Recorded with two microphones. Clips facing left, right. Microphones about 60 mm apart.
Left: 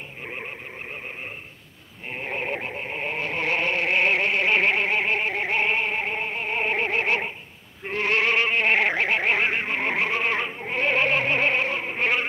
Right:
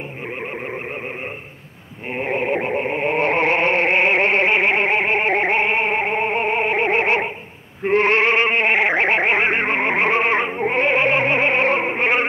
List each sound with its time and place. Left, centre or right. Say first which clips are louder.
2.1 s a sound: right 8 dB; right
2.7 s radio: right 10 dB; right
3.3 s a sound: right 6 dB; right
5.3 s music: right 6 dB; right
6.6 s music: right 6 dB; right
6.9 s a sound: right 6 dB; right
7.8 s music: right 8 dB; right
11.6 s music: right 9 dB; right
12.0 s insect: right 2 dB; right